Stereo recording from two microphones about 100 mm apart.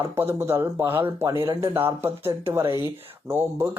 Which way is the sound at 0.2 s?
25° right (ahead or behind).